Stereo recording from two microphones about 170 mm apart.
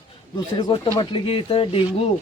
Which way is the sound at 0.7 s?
30° left (ahead or behind).